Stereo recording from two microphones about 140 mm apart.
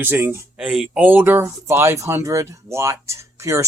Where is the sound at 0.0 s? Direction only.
15° right (ahead or behind).